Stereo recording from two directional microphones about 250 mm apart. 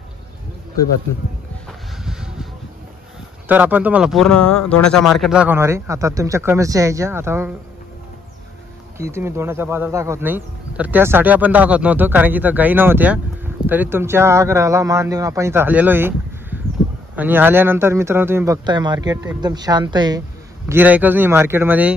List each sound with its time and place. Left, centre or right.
2.0 s a sound: centre
3.4 s speech: centre
8.9 s speech: centre